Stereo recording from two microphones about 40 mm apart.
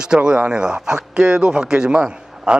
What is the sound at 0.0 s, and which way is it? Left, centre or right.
Speech, right.